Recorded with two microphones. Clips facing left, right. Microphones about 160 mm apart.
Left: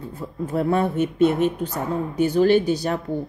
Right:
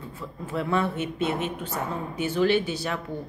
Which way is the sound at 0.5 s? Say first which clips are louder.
Left 5 dB; 45° left (ahead or behind).